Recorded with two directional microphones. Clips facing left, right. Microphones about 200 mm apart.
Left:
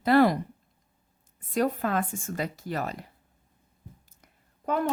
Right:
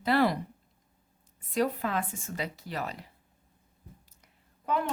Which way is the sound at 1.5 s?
50° left (ahead or behind).